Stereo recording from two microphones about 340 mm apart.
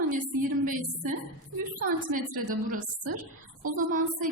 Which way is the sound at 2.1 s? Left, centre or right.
Right.